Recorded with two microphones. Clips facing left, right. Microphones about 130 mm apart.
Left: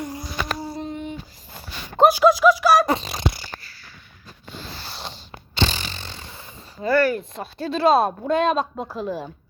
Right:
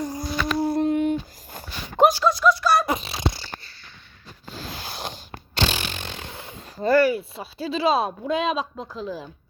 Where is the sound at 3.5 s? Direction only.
25° right (ahead or behind).